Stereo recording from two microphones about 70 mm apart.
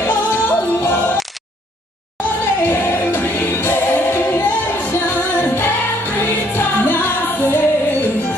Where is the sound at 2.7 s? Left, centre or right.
Left.